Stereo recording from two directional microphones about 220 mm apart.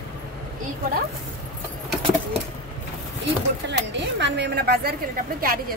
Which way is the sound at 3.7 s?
55° right (ahead or behind).